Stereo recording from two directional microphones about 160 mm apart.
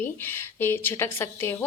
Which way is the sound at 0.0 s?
15° left (ahead or behind).